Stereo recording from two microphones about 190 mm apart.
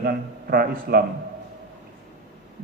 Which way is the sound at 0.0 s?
50° right (ahead or behind).